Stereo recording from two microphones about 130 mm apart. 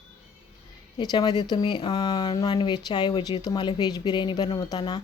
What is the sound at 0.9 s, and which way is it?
Speech, 35° left (ahead or behind).